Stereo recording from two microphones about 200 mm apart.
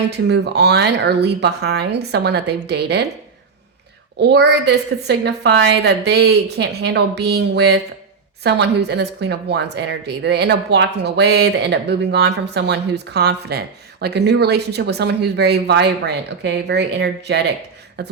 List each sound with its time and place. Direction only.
0.3 s speech: 55° right (ahead or behind)
4.2 s speech: 55° right (ahead or behind)